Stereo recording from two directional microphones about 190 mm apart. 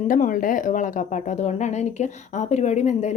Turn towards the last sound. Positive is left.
turn(degrees=35)  # may be behind; listen again after turning